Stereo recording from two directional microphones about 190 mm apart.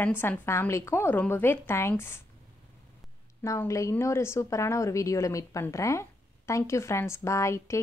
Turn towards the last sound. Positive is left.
turn(degrees=15)  # may be behind; listen again after turning